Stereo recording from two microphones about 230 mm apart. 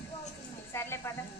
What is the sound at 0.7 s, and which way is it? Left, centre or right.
Speech, centre.